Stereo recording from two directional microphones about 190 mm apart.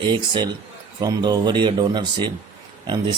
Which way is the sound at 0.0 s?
25° right (ahead or behind).